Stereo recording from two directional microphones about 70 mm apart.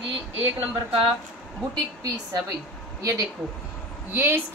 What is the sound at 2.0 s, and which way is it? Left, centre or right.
Speech, right.